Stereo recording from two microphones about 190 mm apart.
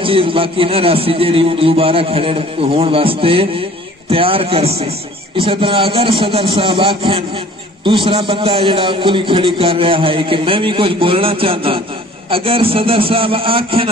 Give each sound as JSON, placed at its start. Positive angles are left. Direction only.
{"t": 0.0, "sound": "a man's voice", "side_deg": -30}